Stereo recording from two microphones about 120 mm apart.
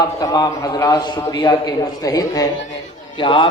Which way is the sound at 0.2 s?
35° left (ahead or behind).